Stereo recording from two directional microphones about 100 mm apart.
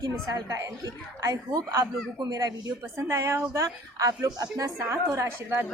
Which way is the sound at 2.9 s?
30° right (ahead or behind).